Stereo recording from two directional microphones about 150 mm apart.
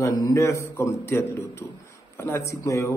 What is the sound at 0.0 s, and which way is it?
A man's voice, 25° left (ahead or behind).